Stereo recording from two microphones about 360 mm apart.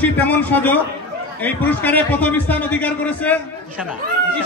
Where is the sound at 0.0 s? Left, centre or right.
Centre.